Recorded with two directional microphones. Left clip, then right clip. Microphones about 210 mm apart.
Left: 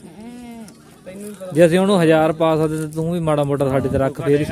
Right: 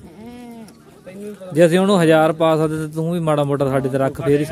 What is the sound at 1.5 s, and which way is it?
A man's voice, 5° right (ahead or behind).